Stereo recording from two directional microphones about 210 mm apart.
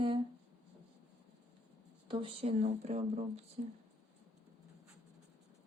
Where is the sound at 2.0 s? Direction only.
25° right (ahead or behind).